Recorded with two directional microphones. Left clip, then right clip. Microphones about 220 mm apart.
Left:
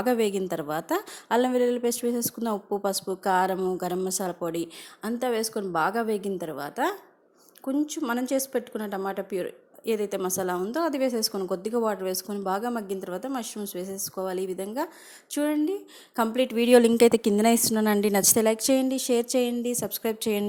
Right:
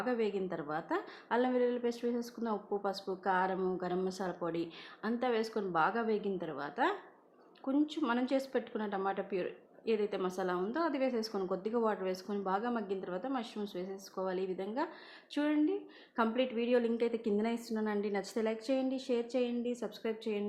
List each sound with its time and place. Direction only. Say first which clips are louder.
0.0 s a woman's voice: left 9 dB; 45° left (ahead or behind)